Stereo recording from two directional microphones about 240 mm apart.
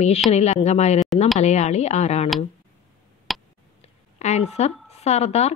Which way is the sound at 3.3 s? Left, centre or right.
Centre.